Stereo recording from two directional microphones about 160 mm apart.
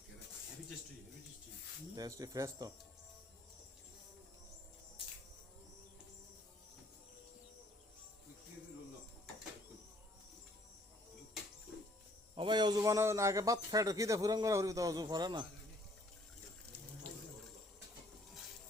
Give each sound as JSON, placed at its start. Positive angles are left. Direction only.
{"t": 2.0, "sound": "a man's voice", "side_deg": -20}
{"t": 12.3, "sound": "a man's voice", "side_deg": -30}